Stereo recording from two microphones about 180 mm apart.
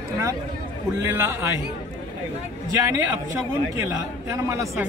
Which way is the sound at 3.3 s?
15° right (ahead or behind).